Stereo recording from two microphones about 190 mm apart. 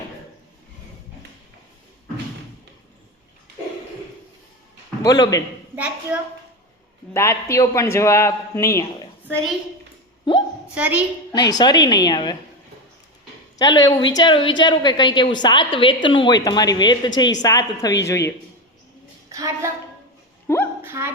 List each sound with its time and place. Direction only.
5.0 s a woman's voice: 20° left (ahead or behind)
5.7 s a woman's voice: 10° right (ahead or behind)
7.1 s a man's voice: 15° left (ahead or behind)
10.8 s a woman's voice: 10° right (ahead or behind)
11.3 s a woman's voice: 20° left (ahead or behind)
13.6 s a woman's voice: 20° left (ahead or behind)
19.3 s a woman's voice: 15° right (ahead or behind)
20.5 s a man's voice: 15° left (ahead or behind)
20.8 s a woman's voice: 15° right (ahead or behind)